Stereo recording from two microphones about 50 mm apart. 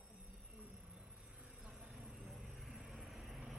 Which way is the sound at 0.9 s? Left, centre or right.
Right.